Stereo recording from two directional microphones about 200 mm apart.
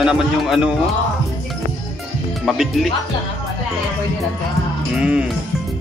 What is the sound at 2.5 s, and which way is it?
Speech, centre (ahead or behind).